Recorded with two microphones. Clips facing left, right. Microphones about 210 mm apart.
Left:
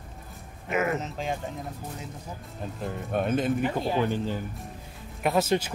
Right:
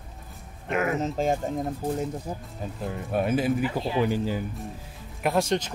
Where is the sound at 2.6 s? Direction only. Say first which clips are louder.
Left 1 dB; 5° right (ahead or behind).